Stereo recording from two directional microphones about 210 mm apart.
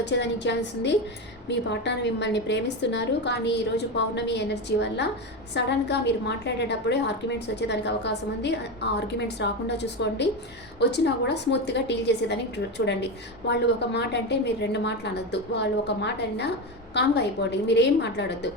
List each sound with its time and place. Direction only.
0.0 s a woman's voice: 55° left (ahead or behind)